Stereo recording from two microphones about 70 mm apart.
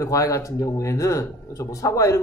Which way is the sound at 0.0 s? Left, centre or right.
Left.